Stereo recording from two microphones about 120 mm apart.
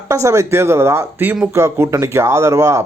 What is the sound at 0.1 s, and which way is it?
Speech, 25° right (ahead or behind).